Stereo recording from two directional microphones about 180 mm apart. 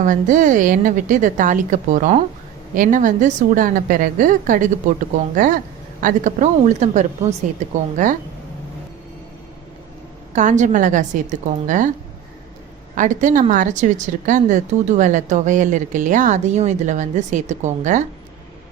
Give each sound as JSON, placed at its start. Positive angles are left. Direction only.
{"t": 0.0, "sound": "a woman's voice", "side_deg": -45}
{"t": 10.3, "sound": "a woman's voice", "side_deg": -40}
{"t": 13.0, "sound": "a woman's voice", "side_deg": -45}